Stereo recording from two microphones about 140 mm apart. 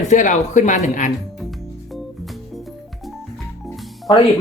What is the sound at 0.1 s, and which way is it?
Speech, 60° left (ahead or behind).